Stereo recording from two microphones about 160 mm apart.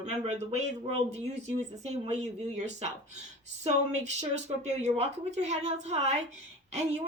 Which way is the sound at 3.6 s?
45° right (ahead or behind).